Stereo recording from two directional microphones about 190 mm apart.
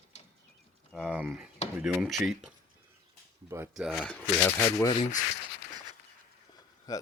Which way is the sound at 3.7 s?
Centre (ahead or behind).